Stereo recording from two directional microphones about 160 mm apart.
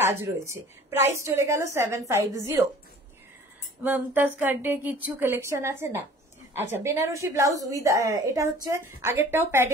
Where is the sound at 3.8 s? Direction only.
10° right (ahead or behind).